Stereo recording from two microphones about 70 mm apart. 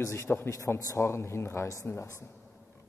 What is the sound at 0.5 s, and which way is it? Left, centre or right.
Speech, left.